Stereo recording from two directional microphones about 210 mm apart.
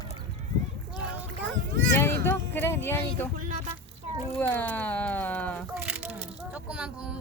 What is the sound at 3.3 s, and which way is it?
Speech, 40° right (ahead or behind).